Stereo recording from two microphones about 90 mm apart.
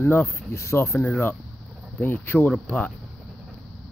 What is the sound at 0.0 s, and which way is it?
Speech, 25° left (ahead or behind).